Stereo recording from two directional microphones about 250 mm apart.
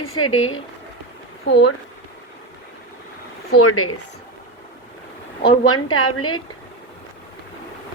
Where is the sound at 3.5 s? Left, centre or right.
Left.